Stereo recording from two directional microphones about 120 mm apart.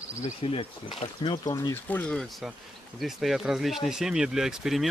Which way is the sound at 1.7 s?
15° left (ahead or behind).